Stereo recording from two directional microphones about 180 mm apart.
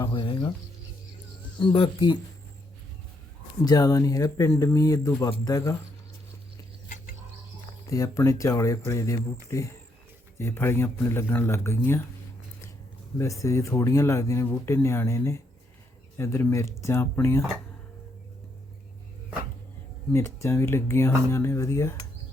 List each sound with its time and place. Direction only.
0.1 s speech: 25° left (ahead or behind)
1.6 s speech: 30° left (ahead or behind)
3.6 s speech: 20° left (ahead or behind)
7.9 s speech: 20° left (ahead or behind)
13.1 s speech: 15° left (ahead or behind)
20.1 s speech: 15° left (ahead or behind)